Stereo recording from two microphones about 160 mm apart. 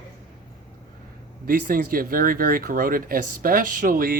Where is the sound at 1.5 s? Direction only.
65° right (ahead or behind).